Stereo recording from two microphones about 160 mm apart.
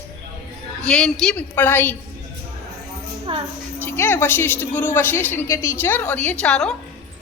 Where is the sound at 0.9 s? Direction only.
5° left (ahead or behind).